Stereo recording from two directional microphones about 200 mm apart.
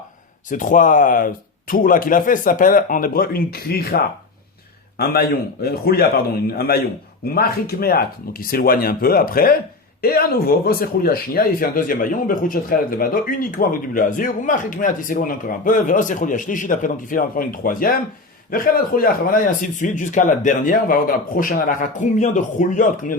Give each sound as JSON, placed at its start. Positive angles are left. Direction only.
{"t": 0.5, "sound": "a man's voice", "side_deg": 40}
{"t": 7.3, "sound": "speech", "side_deg": 50}